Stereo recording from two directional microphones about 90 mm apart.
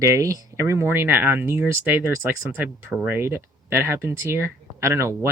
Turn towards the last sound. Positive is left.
turn(degrees=-30)  # may be behind; listen again after turning